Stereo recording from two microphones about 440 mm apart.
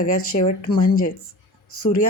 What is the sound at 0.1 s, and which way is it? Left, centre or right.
Speech, left.